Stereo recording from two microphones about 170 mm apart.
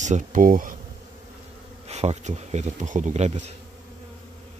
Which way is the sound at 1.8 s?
40° right (ahead or behind).